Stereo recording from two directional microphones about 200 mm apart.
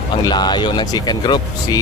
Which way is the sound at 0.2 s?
20° left (ahead or behind).